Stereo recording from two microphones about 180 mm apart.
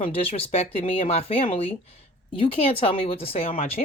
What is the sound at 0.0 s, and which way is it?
A woman's voice, 30° left (ahead or behind).